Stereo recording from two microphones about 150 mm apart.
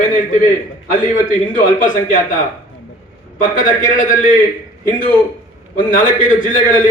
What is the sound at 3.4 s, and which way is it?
Speech, 60° left (ahead or behind).